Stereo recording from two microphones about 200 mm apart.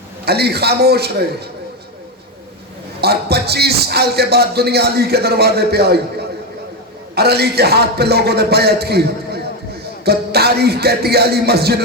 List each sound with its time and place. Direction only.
0.3 s music: 55° right (ahead or behind)
3.0 s music: 55° right (ahead or behind)